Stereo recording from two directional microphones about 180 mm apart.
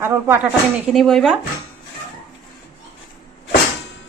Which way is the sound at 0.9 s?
Centre (ahead or behind).